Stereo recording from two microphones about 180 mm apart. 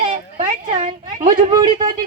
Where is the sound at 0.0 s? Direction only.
40° right (ahead or behind).